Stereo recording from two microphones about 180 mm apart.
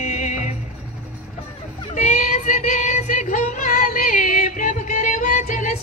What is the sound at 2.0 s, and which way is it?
Music, 45° left (ahead or behind).